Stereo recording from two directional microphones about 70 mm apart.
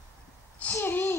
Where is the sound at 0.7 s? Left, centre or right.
Left.